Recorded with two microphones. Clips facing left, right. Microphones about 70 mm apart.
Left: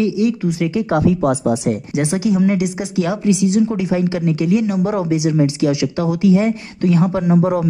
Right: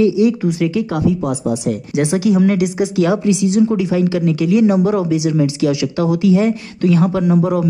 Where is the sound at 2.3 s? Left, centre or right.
Centre.